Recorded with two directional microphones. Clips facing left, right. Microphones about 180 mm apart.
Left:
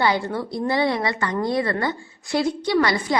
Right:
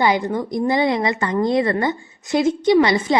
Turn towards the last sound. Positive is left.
turn(degrees=-25)  # may be behind; listen again after turning